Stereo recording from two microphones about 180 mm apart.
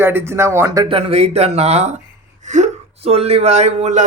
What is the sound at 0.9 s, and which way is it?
Speech, 35° right (ahead or behind).